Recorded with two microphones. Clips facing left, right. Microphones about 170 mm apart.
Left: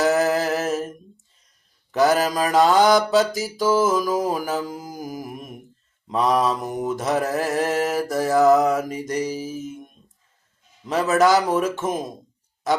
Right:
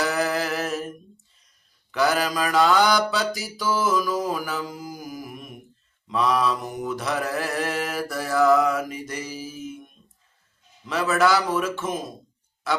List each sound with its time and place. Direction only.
0.0 s a sound: 45° left (ahead or behind)
1.9 s mantra: 45° left (ahead or behind)
10.8 s a man's voice: 40° left (ahead or behind)